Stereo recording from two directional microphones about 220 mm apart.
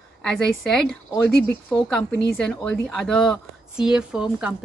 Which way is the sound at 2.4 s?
5° left (ahead or behind).